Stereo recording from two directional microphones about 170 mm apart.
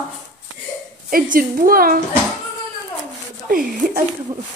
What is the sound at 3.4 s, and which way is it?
Speech, 55° right (ahead or behind).